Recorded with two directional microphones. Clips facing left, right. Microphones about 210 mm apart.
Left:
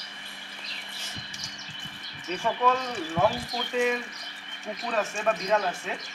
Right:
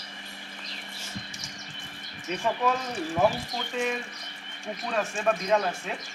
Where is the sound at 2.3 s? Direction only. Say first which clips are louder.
Left 1 dB; 5° right (ahead or behind).